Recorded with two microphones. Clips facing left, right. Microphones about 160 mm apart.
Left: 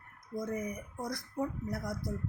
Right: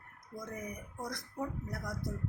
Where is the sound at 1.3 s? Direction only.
20° left (ahead or behind).